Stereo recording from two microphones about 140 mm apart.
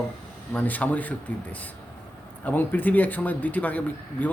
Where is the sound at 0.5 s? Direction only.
10° left (ahead or behind).